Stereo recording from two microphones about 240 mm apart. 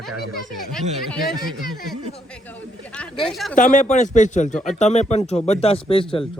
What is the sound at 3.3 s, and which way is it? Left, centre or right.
Speech, centre.